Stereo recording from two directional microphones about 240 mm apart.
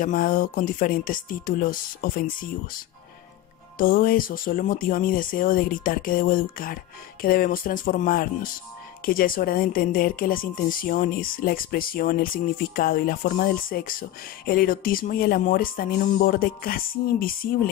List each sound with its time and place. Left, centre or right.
0.0 s speech: left